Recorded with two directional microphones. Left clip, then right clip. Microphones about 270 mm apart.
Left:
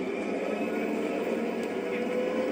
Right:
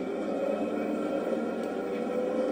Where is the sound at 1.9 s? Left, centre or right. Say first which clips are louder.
Left 1 dB; left.